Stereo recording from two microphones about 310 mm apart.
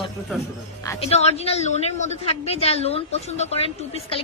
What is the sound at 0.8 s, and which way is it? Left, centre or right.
A woman's voice, centre.